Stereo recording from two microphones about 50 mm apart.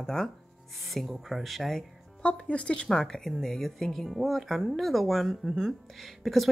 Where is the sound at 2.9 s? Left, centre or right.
Centre.